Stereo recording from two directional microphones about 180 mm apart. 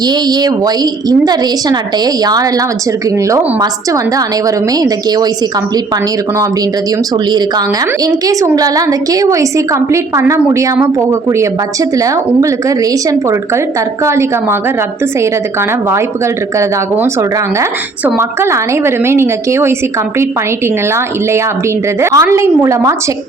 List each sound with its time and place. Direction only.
0.0 s a woman's voice: 20° right (ahead or behind)
7.3 s a woman's voice: 25° right (ahead or behind)
16.6 s a woman's voice: 15° right (ahead or behind)
22.0 s a woman's voice: 15° right (ahead or behind)